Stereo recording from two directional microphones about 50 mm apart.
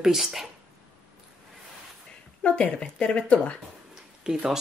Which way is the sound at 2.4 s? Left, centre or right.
Left.